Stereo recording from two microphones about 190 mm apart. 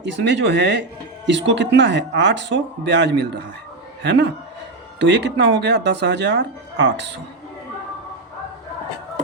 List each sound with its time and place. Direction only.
0.0 s speech: 70° right (ahead or behind)